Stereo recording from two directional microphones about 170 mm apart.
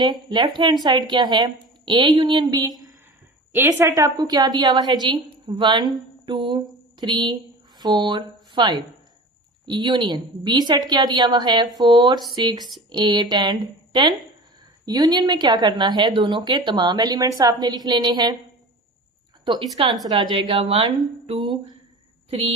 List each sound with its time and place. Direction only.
0.0 s speech: 25° right (ahead or behind)
19.5 s a woman's voice: 25° right (ahead or behind)